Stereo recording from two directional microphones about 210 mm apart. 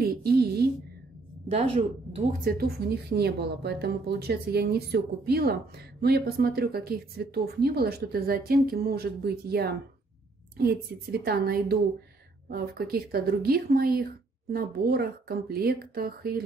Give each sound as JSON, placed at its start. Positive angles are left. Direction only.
{"t": 0.0, "sound": "a sound", "side_deg": -45}
{"t": 1.5, "sound": "a woman's voice", "side_deg": -25}
{"t": 2.4, "sound": "speech", "side_deg": -45}